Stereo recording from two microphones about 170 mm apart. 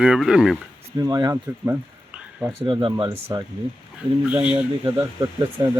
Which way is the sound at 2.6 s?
30° right (ahead or behind).